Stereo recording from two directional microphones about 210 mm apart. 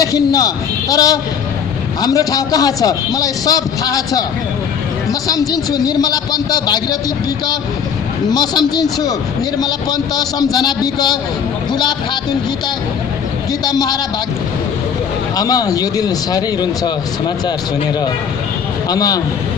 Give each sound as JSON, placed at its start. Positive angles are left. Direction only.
{"t": 0.0, "sound": "a man's voice", "side_deg": 15}
{"t": 5.3, "sound": "a man's voice", "side_deg": 15}
{"t": 8.3, "sound": "a man's voice", "side_deg": 20}
{"t": 13.5, "sound": "a man's voice", "side_deg": 20}
{"t": 15.4, "sound": "a man's voice", "side_deg": 15}
{"t": 18.9, "sound": "a man's voice", "side_deg": 15}